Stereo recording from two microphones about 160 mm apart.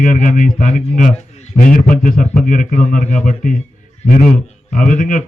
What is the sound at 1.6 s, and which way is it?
A man's voice, 60° left (ahead or behind).